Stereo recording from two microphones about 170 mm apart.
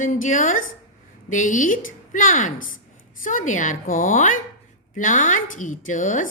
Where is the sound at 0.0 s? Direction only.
50° left (ahead or behind).